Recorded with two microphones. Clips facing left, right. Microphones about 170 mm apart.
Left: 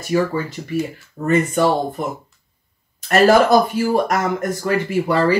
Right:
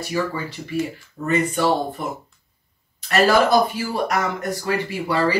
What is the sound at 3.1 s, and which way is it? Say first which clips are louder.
Speech: left 4 dB; 45° left (ahead or behind).